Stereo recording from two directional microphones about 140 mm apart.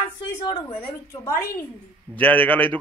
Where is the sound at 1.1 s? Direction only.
20° left (ahead or behind).